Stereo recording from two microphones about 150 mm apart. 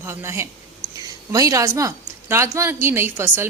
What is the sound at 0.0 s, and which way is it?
A woman's voice, 15° right (ahead or behind).